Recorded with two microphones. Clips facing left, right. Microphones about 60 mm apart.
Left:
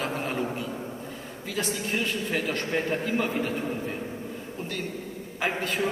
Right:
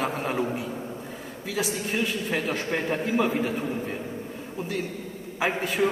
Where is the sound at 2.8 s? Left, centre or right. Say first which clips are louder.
Right 1 dB; centre.